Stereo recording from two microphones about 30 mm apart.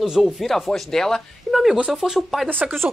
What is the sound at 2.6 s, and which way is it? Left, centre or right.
Speech, right.